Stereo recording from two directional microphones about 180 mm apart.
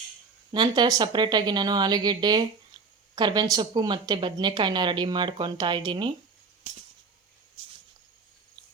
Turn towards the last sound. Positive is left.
turn(degrees=-35)  # may be behind; listen again after turning